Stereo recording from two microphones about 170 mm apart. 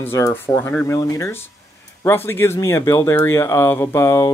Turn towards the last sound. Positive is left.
turn(degrees=15)  # may be behind; listen again after turning